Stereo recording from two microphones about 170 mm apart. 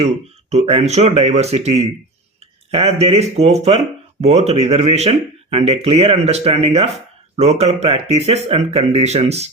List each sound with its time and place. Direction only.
0.5 s speech: 35° right (ahead or behind)